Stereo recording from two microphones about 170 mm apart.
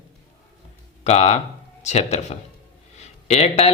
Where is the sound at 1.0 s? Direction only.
40° left (ahead or behind).